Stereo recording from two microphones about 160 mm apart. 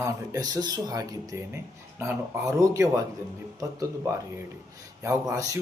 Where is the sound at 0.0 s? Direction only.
20° right (ahead or behind).